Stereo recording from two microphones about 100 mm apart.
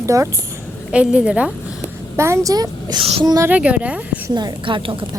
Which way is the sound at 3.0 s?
65° right (ahead or behind).